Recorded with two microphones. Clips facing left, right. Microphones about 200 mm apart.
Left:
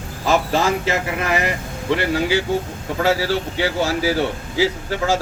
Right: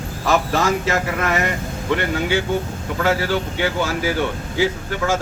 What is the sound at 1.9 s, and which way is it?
Speech, 35° left (ahead or behind).